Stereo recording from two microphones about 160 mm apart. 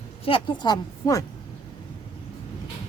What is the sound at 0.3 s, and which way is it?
Speech, 30° left (ahead or behind).